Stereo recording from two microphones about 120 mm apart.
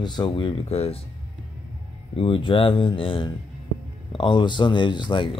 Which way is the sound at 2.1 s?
50° left (ahead or behind).